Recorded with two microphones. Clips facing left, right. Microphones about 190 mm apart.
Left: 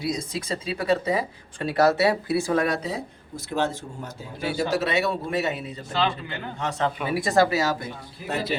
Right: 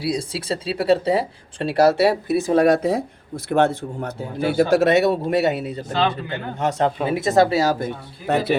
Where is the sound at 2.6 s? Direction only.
45° right (ahead or behind).